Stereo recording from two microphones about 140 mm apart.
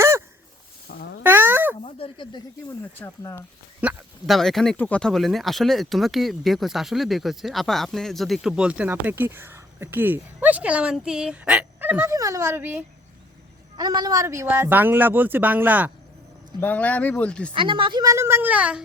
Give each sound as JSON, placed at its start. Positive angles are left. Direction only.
{"t": 1.2, "sound": "a sound", "side_deg": -15}
{"t": 1.8, "sound": "speech", "side_deg": 40}
{"t": 3.0, "sound": "speech", "side_deg": 15}
{"t": 3.8, "sound": "speech", "side_deg": -10}
{"t": 4.4, "sound": "speech", "side_deg": 0}
{"t": 13.7, "sound": "speech", "side_deg": -30}
{"t": 16.6, "sound": "speech", "side_deg": 10}
{"t": 17.5, "sound": "a woman's voice", "side_deg": -35}